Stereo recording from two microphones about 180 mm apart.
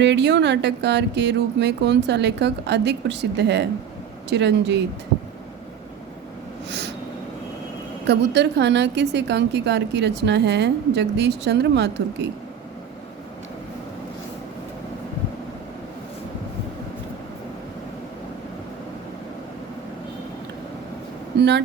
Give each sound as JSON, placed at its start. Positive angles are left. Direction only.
{"t": 0.0, "sound": "a woman's voice", "side_deg": -75}
{"t": 6.7, "sound": "snort", "side_deg": -75}
{"t": 8.0, "sound": "a woman's voice", "side_deg": -75}
{"t": 21.3, "sound": "speech", "side_deg": -70}